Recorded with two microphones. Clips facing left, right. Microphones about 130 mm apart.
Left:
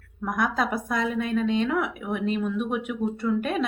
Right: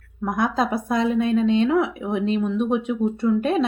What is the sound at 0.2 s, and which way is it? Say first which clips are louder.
A woman's voice: right 4 dB; 25° right (ahead or behind).